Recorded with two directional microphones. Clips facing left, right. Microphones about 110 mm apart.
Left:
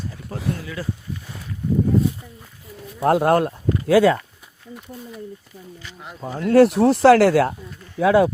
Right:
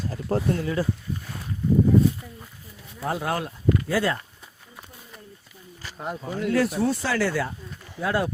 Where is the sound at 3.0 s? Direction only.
60° left (ahead or behind).